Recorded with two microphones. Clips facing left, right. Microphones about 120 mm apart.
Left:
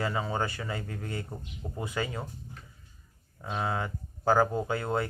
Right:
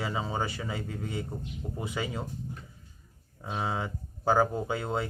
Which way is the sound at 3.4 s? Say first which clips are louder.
Left 1 dB; 10° right (ahead or behind).